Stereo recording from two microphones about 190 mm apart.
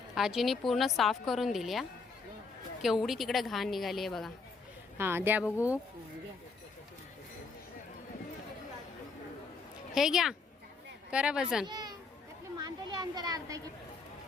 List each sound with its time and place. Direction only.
0.1 s a woman's voice: centre (ahead or behind)
4.9 s speech: 10° right (ahead or behind)
9.9 s a woman's voice: centre (ahead or behind)
11.6 s speech: 20° right (ahead or behind)